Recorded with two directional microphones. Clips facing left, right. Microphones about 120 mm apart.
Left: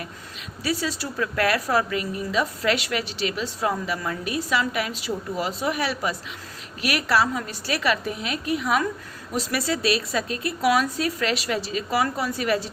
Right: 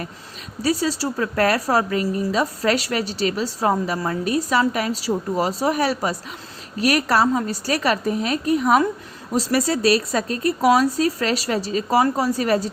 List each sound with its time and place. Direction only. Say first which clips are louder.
0.6 s a woman's voice: right 6 dB; 35° right (ahead or behind)